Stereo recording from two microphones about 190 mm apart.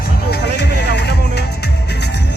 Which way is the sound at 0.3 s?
60° left (ahead or behind).